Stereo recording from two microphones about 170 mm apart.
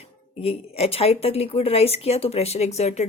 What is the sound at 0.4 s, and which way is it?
Speech, 35° left (ahead or behind).